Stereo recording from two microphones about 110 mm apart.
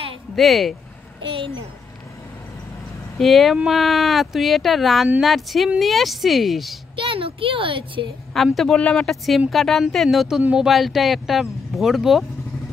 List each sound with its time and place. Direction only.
0.4 s speech: centre (ahead or behind)
3.2 s speech: centre (ahead or behind)
7.0 s speech: 55° right (ahead or behind)
8.5 s speech: 10° left (ahead or behind)